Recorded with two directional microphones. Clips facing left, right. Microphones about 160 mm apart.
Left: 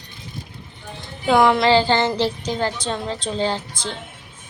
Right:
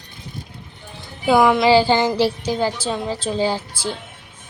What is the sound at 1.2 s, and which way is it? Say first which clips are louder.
A woman's voice: right 1 dB; 5° right (ahead or behind).